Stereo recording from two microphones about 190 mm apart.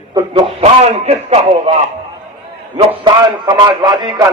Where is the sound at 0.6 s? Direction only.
35° right (ahead or behind).